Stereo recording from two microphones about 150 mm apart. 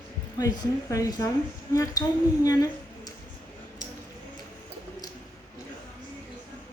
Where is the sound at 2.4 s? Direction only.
25° left (ahead or behind).